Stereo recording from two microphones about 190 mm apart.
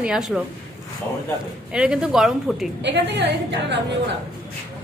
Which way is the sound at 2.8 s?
65° right (ahead or behind).